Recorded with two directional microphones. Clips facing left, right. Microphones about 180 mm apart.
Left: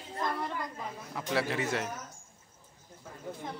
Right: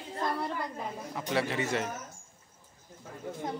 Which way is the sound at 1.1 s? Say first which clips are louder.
Even; centre (ahead or behind).